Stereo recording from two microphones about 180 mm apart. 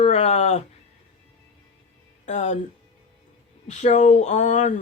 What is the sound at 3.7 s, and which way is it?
Speech, 40° left (ahead or behind).